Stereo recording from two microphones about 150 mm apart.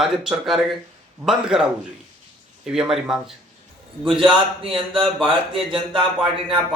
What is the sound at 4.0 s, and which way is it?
A man's voice, 35° right (ahead or behind).